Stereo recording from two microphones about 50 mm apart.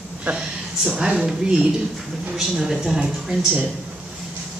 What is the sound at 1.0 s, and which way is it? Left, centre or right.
A woman's voice, centre.